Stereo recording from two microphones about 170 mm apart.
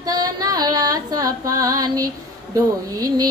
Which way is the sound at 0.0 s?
20° right (ahead or behind).